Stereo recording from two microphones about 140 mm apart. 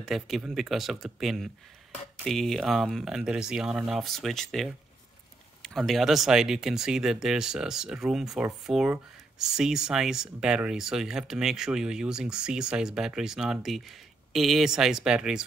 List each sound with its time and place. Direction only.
0.0 s speech: centre (ahead or behind)